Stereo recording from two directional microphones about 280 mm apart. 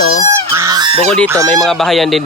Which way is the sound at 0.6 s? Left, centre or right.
Centre.